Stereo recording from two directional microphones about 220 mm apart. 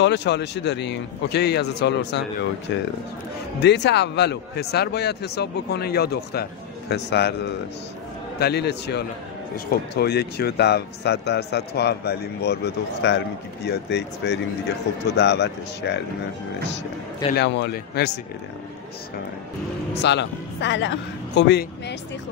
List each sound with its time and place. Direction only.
0.0 s speech: 50° left (ahead or behind)
17.4 s speech: 50° left (ahead or behind)
20.0 s speech: 50° left (ahead or behind)